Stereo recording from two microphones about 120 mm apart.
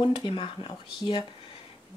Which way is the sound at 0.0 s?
40° left (ahead or behind).